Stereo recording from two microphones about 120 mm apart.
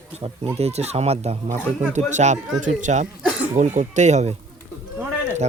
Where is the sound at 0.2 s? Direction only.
55° right (ahead or behind).